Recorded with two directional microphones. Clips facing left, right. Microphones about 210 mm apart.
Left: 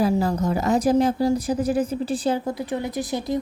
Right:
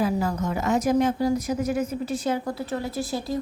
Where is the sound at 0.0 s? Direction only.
35° left (ahead or behind).